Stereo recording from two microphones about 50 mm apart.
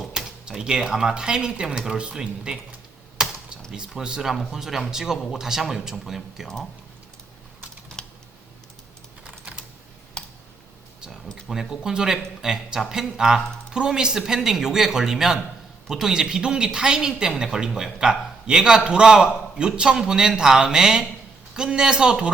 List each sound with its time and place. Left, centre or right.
0.0 s a sound: centre
0.4 s speech: centre
3.2 s computer keyboard: centre
3.7 s speech: centre
7.9 s typing: centre
10.2 s tick: centre
11.6 s speech: centre